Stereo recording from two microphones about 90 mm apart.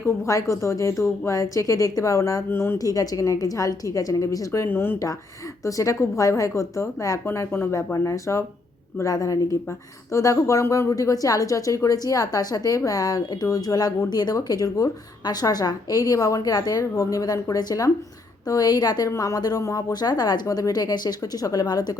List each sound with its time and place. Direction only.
0.0 s a woman's voice: 35° left (ahead or behind)
2.5 s speech: 25° left (ahead or behind)
2.7 s a woman's voice: 45° left (ahead or behind)
4.6 s speech: 25° left (ahead or behind)
5.6 s a woman's voice: 35° left (ahead or behind)
7.3 s a woman's voice: 25° left (ahead or behind); by 21.9 s 45° left (ahead or behind)